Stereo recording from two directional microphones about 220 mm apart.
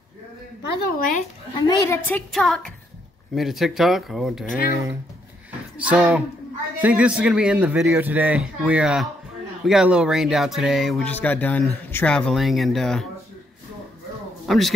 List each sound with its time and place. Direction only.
0.8 s speech: 40° left (ahead or behind)
1.5 s a woman's voice: 15° left (ahead or behind); by 4.5 s centre (ahead or behind)
5.8 s speech: 5° right (ahead or behind)
14.5 s speech: centre (ahead or behind)